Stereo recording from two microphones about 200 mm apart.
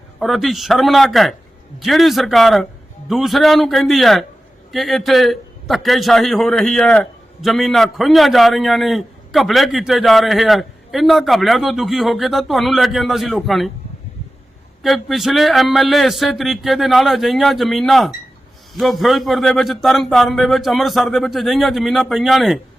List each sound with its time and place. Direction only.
0.2 s a man's voice: centre (ahead or behind)
14.8 s a man's voice: centre (ahead or behind)